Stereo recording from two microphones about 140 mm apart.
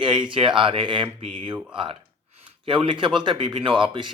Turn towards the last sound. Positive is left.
turn(degrees=-35)  # may be behind; listen again after turning